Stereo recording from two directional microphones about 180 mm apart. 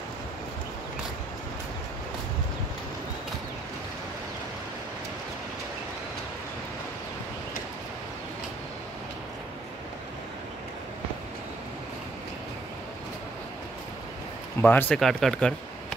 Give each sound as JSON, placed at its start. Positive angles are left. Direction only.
{"t": 14.6, "sound": "speech", "side_deg": 10}